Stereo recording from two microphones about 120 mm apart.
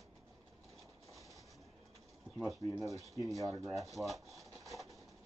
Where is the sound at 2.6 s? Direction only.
60° right (ahead or behind).